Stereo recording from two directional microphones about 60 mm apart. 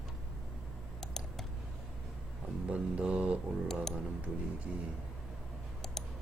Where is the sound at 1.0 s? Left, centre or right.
Centre.